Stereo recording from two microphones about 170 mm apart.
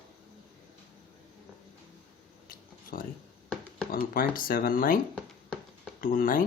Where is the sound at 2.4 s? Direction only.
55° left (ahead or behind).